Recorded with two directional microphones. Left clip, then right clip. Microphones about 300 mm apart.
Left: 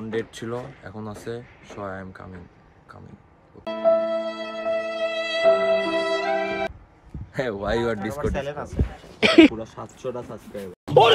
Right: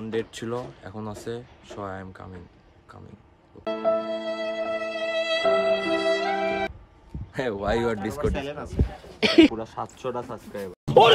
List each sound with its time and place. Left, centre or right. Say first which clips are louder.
0.0 s speech: left 1 dB; centre
3.6 s music: left 4 dB; centre
7.3 s speech: left 1 dB; centre
8.2 s speech: left 1 dB; centre
9.2 s speech: left 3 dB; centre
10.4 s speech: right 1 dB; centre